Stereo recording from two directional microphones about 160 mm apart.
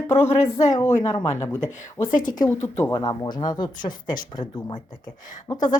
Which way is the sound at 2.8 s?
25° left (ahead or behind).